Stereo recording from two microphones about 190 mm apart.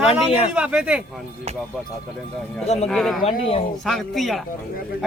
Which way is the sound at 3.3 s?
30° left (ahead or behind).